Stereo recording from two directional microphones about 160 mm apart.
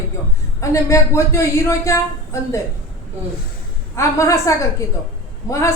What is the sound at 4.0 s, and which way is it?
Speech, 20° left (ahead or behind).